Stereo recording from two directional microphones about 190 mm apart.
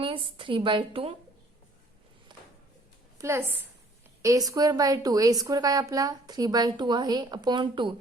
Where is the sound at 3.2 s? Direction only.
15° right (ahead or behind).